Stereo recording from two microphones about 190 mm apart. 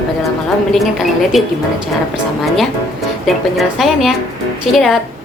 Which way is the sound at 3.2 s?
Centre (ahead or behind).